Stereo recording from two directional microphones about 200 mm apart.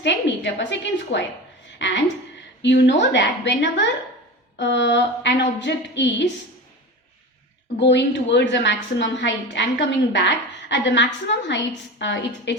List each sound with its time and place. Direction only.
0.0 s a woman's voice: 60° left (ahead or behind)
7.8 s a woman's voice: 60° left (ahead or behind)